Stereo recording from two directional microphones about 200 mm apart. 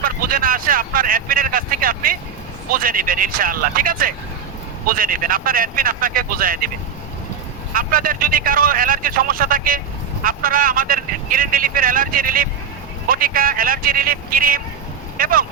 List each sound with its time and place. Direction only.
0.0 s vehicle: 45° right (ahead or behind)
2.6 s speech: 45° right (ahead or behind)
7.7 s speech: 45° right (ahead or behind)